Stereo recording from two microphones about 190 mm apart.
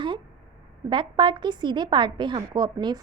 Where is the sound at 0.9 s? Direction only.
25° right (ahead or behind).